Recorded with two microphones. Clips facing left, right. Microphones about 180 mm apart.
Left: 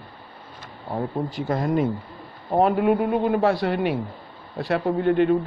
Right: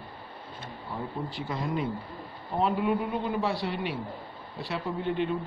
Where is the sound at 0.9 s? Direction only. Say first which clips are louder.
Left 9 dB; 45° left (ahead or behind).